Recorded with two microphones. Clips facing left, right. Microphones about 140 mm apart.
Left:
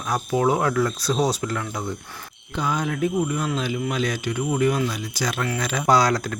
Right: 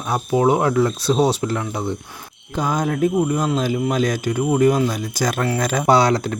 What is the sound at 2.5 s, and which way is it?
Speech, 40° right (ahead or behind).